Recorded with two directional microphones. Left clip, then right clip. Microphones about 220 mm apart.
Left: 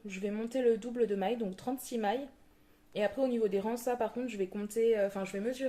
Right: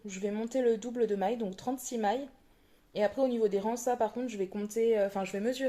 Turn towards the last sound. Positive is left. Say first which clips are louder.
# right 2 dB
turn(degrees=-25)  # may be behind; listen again after turning